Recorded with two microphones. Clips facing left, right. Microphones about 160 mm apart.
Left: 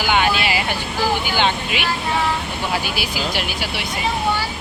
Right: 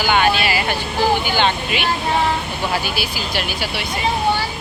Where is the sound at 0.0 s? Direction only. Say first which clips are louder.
Right 2 dB; 15° left (ahead or behind).